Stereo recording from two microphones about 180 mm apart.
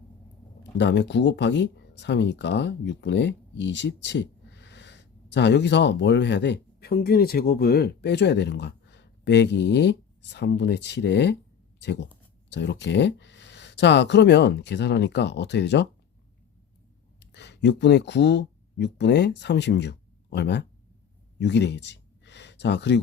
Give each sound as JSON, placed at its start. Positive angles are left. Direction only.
{"t": 0.6, "sound": "speech", "side_deg": 75}
{"t": 17.3, "sound": "speech", "side_deg": 70}
{"t": 21.3, "sound": "a sound", "side_deg": 75}